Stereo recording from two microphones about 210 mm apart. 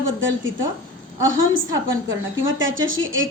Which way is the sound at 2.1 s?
65° right (ahead or behind).